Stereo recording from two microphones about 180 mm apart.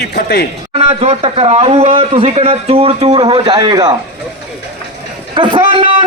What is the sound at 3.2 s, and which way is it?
Speech, 20° right (ahead or behind).